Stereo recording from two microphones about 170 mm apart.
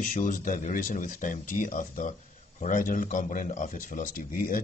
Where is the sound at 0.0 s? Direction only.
50° left (ahead or behind).